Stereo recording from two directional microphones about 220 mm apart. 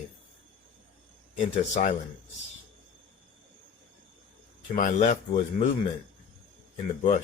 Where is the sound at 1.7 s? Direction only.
35° left (ahead or behind).